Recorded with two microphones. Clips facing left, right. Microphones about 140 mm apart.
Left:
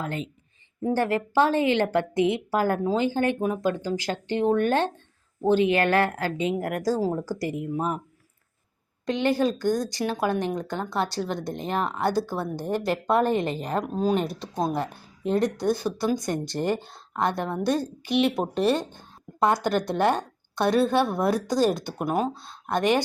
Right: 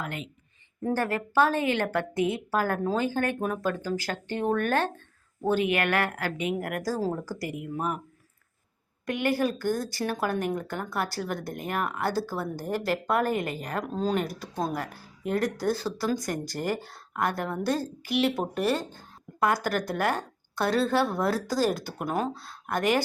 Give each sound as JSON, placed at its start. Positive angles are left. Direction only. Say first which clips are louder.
{"t": 0.0, "sound": "speech", "louder": "left 4 dB", "side_deg": 30}
{"t": 9.0, "sound": "speech", "louder": "left 3 dB", "side_deg": 20}